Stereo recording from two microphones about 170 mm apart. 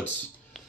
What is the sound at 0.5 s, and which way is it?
Music, centre (ahead or behind).